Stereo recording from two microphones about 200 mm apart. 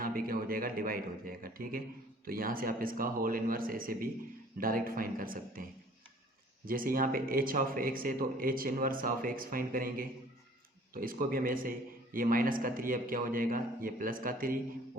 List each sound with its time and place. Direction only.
0.0 s speech: 45° right (ahead or behind)
6.7 s speech: 45° right (ahead or behind)